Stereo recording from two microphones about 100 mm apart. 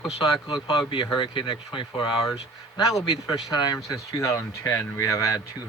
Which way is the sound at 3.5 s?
40° left (ahead or behind).